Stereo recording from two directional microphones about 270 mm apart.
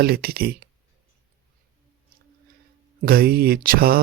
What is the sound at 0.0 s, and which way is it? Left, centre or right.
Speech, right.